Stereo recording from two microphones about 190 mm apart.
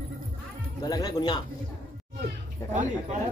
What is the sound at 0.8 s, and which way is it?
Speech, 20° left (ahead or behind).